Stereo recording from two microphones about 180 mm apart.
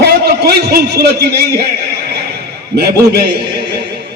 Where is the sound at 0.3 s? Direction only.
60° right (ahead or behind).